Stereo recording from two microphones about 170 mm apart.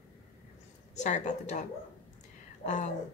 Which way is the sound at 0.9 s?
45° left (ahead or behind).